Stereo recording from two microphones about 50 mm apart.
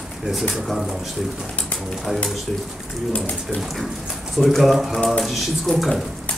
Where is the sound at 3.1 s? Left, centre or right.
Left.